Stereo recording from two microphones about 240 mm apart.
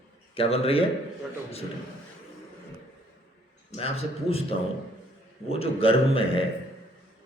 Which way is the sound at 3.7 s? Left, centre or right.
Left.